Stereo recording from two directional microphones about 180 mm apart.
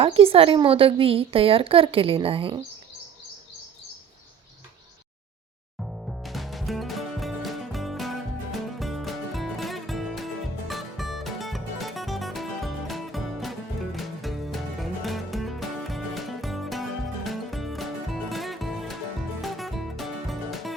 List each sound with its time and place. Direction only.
0.0 s a woman's voice: 30° right (ahead or behind)
5.8 s music: centre (ahead or behind)